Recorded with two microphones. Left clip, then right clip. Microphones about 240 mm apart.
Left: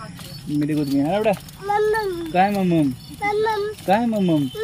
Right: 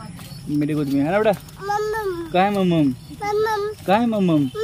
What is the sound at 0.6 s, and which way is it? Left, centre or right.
Speech, centre.